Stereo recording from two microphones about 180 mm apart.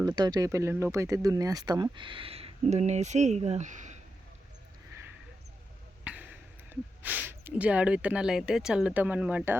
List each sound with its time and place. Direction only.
0.0 s speech: 20° right (ahead or behind); by 4.0 s 40° right (ahead or behind)
6.1 s a sound: 5° right (ahead or behind)
6.7 s speech: 10° right (ahead or behind)